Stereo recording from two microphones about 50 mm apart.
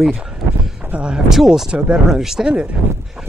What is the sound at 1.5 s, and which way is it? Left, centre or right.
Speech, centre.